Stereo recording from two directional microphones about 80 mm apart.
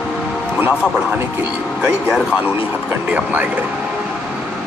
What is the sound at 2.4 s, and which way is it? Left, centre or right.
Speech, right.